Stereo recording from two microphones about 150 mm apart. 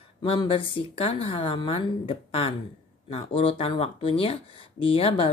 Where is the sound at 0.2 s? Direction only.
35° left (ahead or behind).